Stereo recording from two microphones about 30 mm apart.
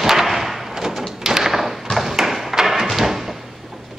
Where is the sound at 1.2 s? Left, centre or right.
Centre.